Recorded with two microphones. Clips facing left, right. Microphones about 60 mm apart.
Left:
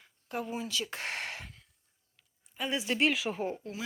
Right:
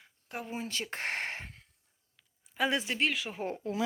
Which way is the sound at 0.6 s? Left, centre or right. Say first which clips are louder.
Left 1 dB; right.